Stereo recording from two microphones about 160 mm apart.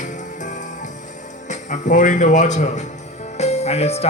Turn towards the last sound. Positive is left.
turn(degrees=40)  # may be behind; listen again after turning